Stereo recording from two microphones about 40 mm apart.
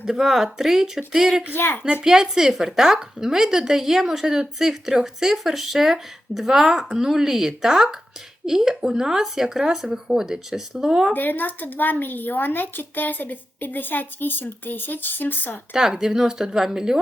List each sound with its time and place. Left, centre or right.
0.0 s a woman's voice: centre
1.5 s speech: left
2.0 s a woman's voice: centre
11.1 s speech: left
15.7 s a woman's voice: centre